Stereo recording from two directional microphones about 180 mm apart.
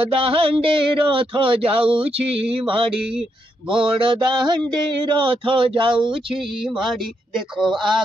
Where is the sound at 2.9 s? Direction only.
5° right (ahead or behind).